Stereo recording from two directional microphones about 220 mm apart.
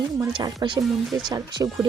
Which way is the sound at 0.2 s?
20° right (ahead or behind).